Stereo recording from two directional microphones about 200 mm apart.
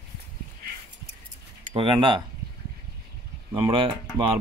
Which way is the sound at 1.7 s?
25° right (ahead or behind).